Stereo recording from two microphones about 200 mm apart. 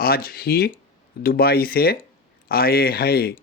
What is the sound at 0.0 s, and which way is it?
Speech, 50° left (ahead or behind).